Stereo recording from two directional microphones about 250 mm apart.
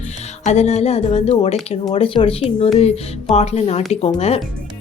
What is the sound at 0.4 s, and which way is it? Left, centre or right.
Speech, left.